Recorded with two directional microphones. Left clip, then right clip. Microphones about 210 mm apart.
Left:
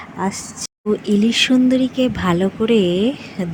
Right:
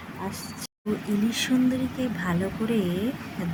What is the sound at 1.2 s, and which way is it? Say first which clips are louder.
Speech: left 9 dB; 35° left (ahead or behind).